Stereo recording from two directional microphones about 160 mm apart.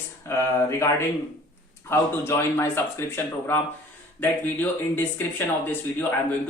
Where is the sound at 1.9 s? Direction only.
15° left (ahead or behind).